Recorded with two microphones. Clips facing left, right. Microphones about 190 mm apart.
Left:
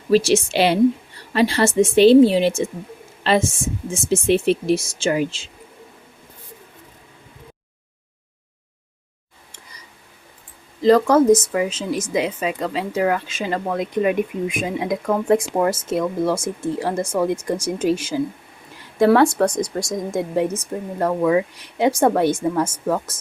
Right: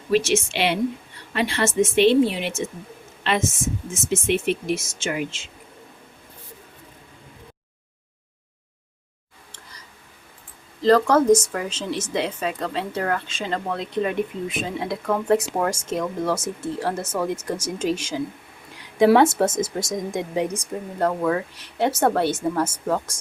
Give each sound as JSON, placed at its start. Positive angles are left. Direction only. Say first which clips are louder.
{"t": 0.1, "sound": "speech", "louder": "left 4 dB", "side_deg": 35}
{"t": 10.8, "sound": "speech", "louder": "left 3 dB", "side_deg": 10}
{"t": 11.3, "sound": "speech", "louder": "left 2 dB", "side_deg": -10}
{"t": 11.5, "sound": "speech", "louder": "left 5 dB", "side_deg": 10}
{"t": 18.9, "sound": "speech", "louder": "left 1 dB", "side_deg": 0}